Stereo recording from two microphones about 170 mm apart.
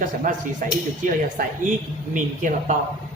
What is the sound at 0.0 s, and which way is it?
Speech, 50° right (ahead or behind).